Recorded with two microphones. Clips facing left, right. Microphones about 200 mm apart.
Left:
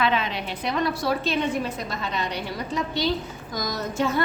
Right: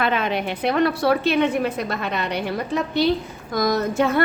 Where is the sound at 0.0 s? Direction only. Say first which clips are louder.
Right 3 dB; 55° right (ahead or behind).